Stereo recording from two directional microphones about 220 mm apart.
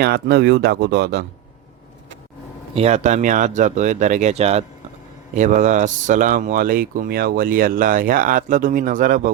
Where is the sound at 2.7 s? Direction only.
30° right (ahead or behind).